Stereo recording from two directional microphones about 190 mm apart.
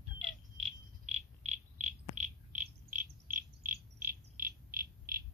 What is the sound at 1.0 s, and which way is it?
Insect, 35° right (ahead or behind).